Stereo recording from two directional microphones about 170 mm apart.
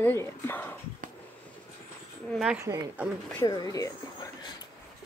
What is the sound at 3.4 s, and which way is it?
Speech, 25° left (ahead or behind).